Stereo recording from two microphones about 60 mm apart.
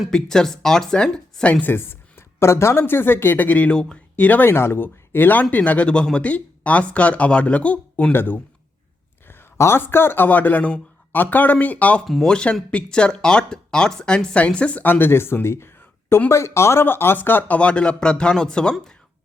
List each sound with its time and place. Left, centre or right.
0.1 s speech: centre
1.6 s speech: left
4.4 s speech: left
8.1 s speech: left
12.0 s speech: centre
12.3 s speech: centre; by 16.8 s left
16.8 s speech: left
17.6 s speech: centre